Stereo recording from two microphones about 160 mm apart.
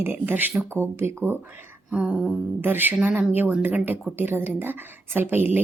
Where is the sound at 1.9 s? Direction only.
5° right (ahead or behind).